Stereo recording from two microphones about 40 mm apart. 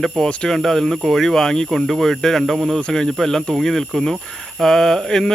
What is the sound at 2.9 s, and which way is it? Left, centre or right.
Speech, centre.